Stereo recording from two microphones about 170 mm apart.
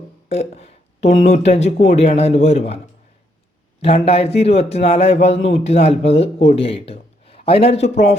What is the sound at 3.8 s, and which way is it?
A man's voice, 35° left (ahead or behind).